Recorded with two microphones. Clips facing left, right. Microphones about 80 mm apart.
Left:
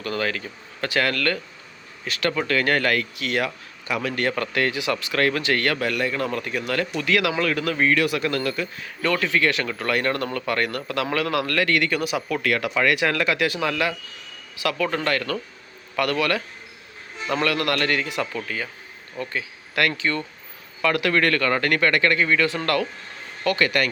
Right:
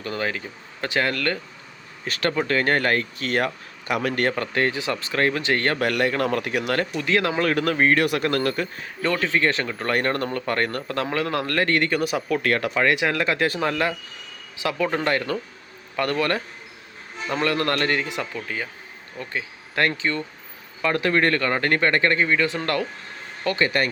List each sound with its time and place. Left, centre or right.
0.0 s speech: right
2.0 s a man's voice: right
2.3 s a man's voice: right
4.4 s speech: right
5.8 s a man's voice: right
6.9 s a man's voice: right
9.0 s a man's voice: right
14.6 s a man's voice: right